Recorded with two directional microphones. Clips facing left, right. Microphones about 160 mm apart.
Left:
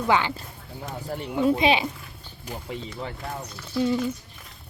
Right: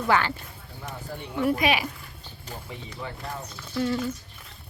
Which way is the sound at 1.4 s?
25° left (ahead or behind).